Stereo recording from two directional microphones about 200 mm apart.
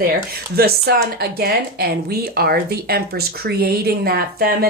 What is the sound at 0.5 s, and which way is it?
Speech, 50° right (ahead or behind).